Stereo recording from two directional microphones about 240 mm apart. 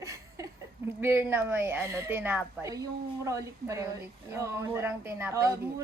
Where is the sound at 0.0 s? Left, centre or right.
Centre.